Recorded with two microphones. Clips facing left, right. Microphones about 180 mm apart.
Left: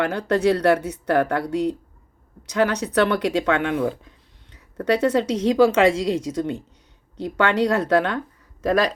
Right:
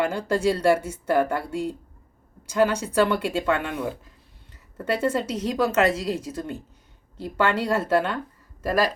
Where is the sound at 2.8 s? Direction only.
70° left (ahead or behind).